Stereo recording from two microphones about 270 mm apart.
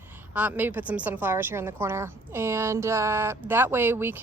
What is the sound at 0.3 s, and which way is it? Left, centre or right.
A woman's voice, centre.